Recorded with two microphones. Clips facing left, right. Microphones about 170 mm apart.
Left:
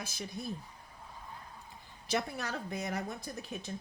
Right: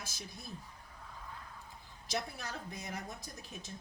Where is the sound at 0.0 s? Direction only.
60° left (ahead or behind).